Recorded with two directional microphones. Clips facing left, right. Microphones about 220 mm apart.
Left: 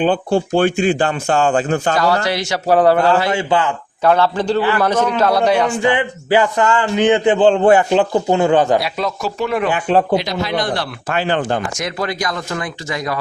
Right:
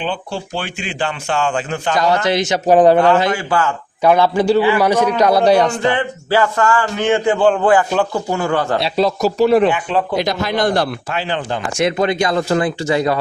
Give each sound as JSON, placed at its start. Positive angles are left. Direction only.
{"t": 0.0, "sound": "a man's voice", "side_deg": 50}
{"t": 2.0, "sound": "speech", "side_deg": -20}
{"t": 3.2, "sound": "a man's voice", "side_deg": 20}
{"t": 4.0, "sound": "a man's voice", "side_deg": -15}
{"t": 5.5, "sound": "speech", "side_deg": -40}
{"t": 5.8, "sound": "a man's voice", "side_deg": 15}
{"t": 8.8, "sound": "speech", "side_deg": -35}
{"t": 9.7, "sound": "speech", "side_deg": 40}
{"t": 10.2, "sound": "speech", "side_deg": -50}
{"t": 11.1, "sound": "a man's voice", "side_deg": 50}
{"t": 11.7, "sound": "speech", "side_deg": -25}